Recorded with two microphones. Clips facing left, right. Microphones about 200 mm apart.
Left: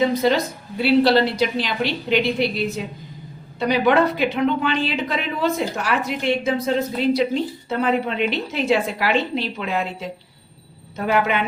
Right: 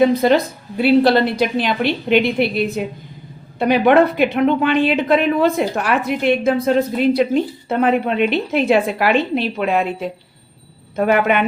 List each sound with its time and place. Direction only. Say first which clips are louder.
0.0 s a woman's voice: right 5 dB; 55° right (ahead or behind)